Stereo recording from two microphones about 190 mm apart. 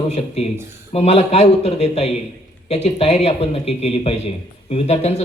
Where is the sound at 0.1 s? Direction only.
35° left (ahead or behind).